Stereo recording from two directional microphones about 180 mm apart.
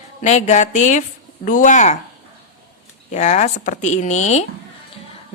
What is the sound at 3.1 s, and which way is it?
Speech, 40° left (ahead or behind).